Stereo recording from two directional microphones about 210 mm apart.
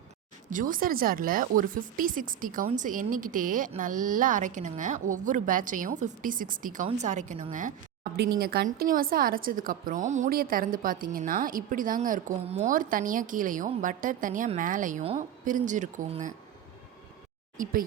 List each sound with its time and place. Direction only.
0.5 s a woman's voice: 40° right (ahead or behind)
8.4 s a woman's voice: 45° right (ahead or behind)
17.6 s speech: 40° right (ahead or behind)